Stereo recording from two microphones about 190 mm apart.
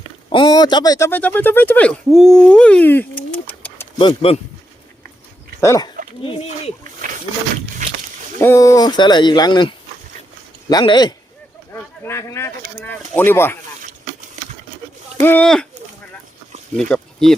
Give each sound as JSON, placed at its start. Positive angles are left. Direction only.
{"t": 0.3, "sound": "speech", "side_deg": 25}
{"t": 3.9, "sound": "speech", "side_deg": 30}
{"t": 5.5, "sound": "speech", "side_deg": 15}
{"t": 7.8, "sound": "a sound", "side_deg": -40}
{"t": 8.4, "sound": "speech", "side_deg": 15}
{"t": 15.2, "sound": "speech", "side_deg": 10}
{"t": 16.9, "sound": "speech", "side_deg": 0}